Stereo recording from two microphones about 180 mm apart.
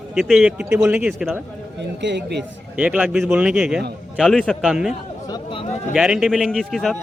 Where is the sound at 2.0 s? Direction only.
75° right (ahead or behind).